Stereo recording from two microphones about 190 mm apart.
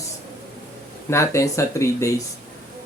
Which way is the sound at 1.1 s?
15° left (ahead or behind).